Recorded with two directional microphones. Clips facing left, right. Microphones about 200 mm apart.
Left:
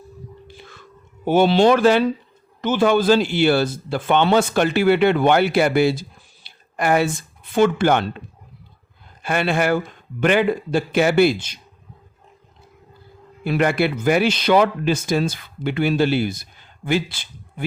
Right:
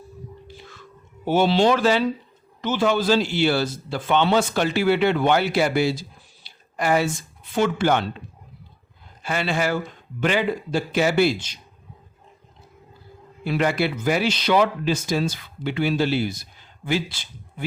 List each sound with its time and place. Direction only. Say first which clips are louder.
1.2 s a man's voice: left 4 dB; 55° left (ahead or behind)
9.2 s a man's voice: left 4 dB; 55° left (ahead or behind)
13.4 s a man's voice: left 3 dB; 55° left (ahead or behind)